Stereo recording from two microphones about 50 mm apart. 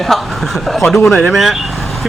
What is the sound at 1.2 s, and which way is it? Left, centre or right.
Speech, centre.